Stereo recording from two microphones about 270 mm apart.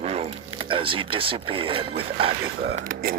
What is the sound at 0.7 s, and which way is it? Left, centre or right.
Speech, centre.